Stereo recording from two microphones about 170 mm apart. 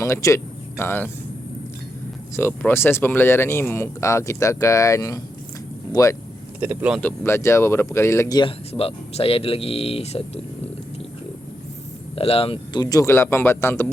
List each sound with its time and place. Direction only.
0.0 s speech: 20° left (ahead or behind)
2.3 s speech: 10° left (ahead or behind)
6.6 s speech: 10° right (ahead or behind)
7.0 s speech: 15° left (ahead or behind); by 10.4 s 40° left (ahead or behind)
12.1 s speech: 35° left (ahead or behind); by 13.8 s 15° left (ahead or behind)